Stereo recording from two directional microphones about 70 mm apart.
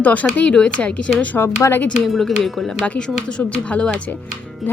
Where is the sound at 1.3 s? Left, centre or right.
Left.